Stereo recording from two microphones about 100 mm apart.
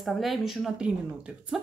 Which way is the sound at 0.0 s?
Centre (ahead or behind).